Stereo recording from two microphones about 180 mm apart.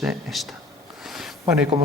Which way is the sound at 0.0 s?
Centre (ahead or behind).